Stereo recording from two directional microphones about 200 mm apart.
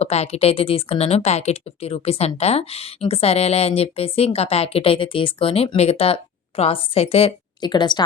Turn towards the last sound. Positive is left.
turn(degrees=20)  # may be behind; listen again after turning